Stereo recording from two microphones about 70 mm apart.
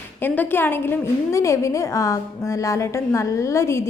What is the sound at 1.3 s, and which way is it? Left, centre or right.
A woman's voice, left.